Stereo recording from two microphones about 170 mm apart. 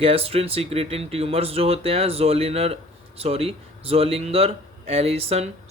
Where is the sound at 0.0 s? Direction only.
35° right (ahead or behind).